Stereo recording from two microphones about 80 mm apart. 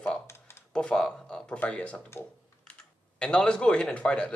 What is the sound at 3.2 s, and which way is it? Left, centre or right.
Speech, centre.